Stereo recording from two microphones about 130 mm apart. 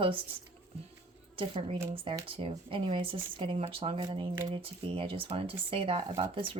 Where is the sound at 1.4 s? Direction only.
45° right (ahead or behind).